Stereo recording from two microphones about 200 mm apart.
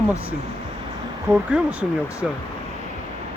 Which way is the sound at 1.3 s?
5° right (ahead or behind).